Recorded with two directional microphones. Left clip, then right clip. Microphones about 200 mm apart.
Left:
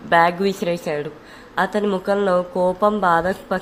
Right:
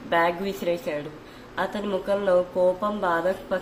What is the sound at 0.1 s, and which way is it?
A woman's voice, 50° left (ahead or behind).